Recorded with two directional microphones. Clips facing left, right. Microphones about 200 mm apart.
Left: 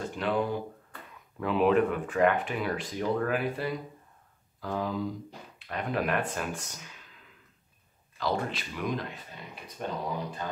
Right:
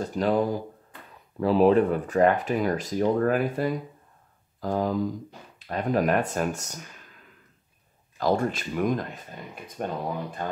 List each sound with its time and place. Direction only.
0.0 s speech: 40° right (ahead or behind)
8.2 s speech: 45° right (ahead or behind)